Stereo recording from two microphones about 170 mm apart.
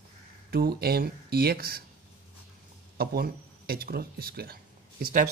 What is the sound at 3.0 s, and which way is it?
A man's voice, 65° right (ahead or behind).